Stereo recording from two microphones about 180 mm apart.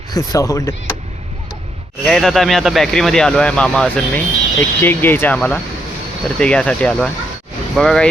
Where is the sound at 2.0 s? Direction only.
Centre (ahead or behind).